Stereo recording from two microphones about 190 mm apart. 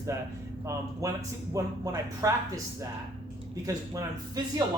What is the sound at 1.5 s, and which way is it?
Speech, 15° right (ahead or behind).